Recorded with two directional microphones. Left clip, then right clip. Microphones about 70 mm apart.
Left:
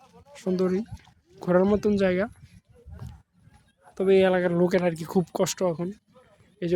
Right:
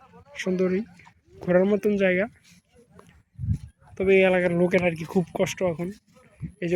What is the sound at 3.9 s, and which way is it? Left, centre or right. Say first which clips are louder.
Speech: right 1 dB; left.